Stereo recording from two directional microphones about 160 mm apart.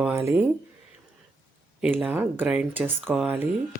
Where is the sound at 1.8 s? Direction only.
5° right (ahead or behind).